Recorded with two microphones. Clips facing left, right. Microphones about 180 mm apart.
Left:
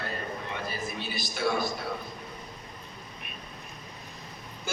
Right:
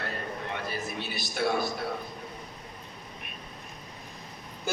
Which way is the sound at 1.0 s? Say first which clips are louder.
Right 2 dB; 60° right (ahead or behind).